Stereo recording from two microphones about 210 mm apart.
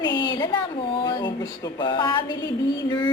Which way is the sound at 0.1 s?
20° left (ahead or behind).